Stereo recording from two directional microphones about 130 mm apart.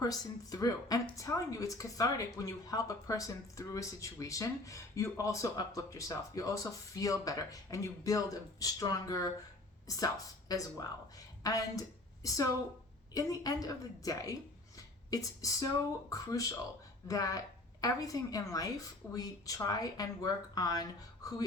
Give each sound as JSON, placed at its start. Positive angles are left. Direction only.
{"t": 0.0, "sound": "a woman's voice", "side_deg": 30}